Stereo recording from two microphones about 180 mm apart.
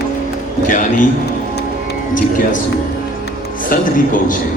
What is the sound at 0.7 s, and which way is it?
Speech, 45° left (ahead or behind).